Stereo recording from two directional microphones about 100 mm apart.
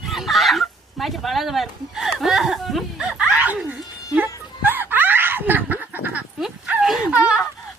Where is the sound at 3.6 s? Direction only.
20° right (ahead or behind).